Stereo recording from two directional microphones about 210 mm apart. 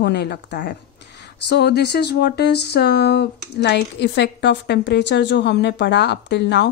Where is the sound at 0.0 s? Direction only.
50° left (ahead or behind).